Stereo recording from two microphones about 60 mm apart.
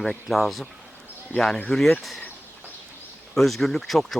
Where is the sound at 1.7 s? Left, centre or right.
Centre.